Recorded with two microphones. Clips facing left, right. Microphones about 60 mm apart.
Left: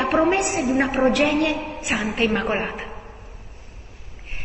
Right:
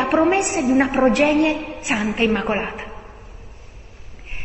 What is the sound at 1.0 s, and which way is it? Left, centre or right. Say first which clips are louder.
Speech: right 2 dB; right.